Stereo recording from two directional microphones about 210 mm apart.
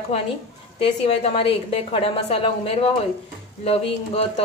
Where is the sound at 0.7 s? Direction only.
30° left (ahead or behind).